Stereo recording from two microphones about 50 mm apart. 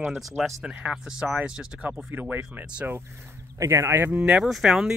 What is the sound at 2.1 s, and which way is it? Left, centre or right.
Speech, right.